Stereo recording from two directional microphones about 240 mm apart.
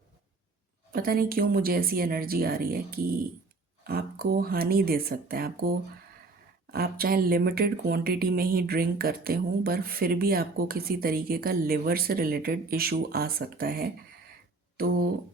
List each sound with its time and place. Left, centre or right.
0.9 s speech: right